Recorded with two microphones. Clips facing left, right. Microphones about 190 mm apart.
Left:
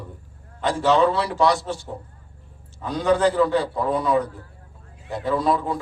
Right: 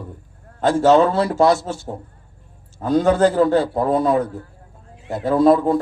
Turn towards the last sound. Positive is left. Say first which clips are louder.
# right 8 dB
turn(degrees=-45)  # may be behind; listen again after turning